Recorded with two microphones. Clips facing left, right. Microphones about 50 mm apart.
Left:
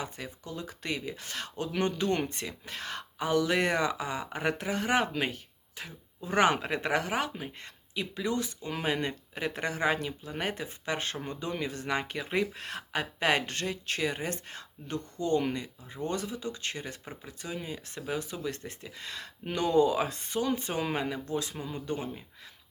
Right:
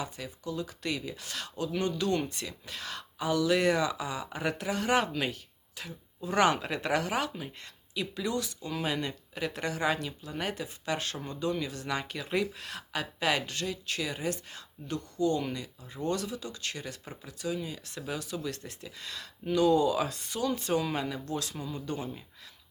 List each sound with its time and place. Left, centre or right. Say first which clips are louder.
0.0 s speech: right 1 dB; left